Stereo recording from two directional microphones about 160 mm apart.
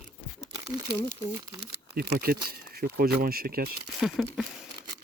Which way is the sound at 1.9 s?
75° right (ahead or behind).